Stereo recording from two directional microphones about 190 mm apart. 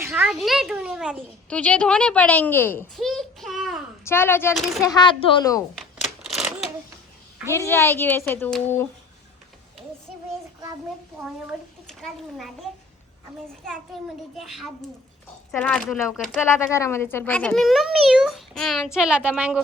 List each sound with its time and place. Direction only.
0.0 s a sound: 15° right (ahead or behind)
0.3 s a child's voice: centre (ahead or behind)
3.0 s a sound: centre (ahead or behind)
4.0 s a woman's voice: 10° left (ahead or behind)
7.5 s a woman's voice: 15° left (ahead or behind)
11.9 s a child's voice: centre (ahead or behind)
13.9 s a child's voice: centre (ahead or behind)
16.5 s a child's voice: 15° left (ahead or behind); by 19.6 s 5° right (ahead or behind)